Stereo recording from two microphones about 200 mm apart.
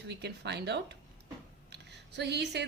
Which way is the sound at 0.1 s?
55° right (ahead or behind).